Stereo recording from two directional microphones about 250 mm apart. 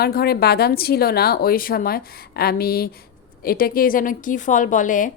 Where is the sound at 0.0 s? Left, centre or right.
Left.